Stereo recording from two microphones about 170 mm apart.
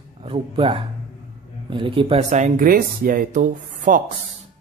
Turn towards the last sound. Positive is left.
turn(degrees=-50)  # may be behind; listen again after turning